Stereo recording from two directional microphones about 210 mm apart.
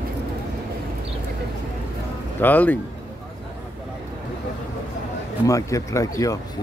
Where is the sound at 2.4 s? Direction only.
10° left (ahead or behind).